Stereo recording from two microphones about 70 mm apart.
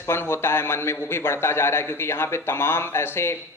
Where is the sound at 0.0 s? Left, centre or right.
Left.